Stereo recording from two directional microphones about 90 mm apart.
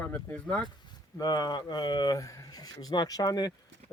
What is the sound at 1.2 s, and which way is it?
Speech, 50° left (ahead or behind).